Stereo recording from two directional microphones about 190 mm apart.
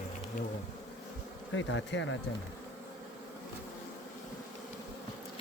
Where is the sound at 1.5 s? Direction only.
90° left.